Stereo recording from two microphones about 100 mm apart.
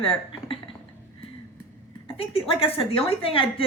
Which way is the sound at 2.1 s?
70° left (ahead or behind).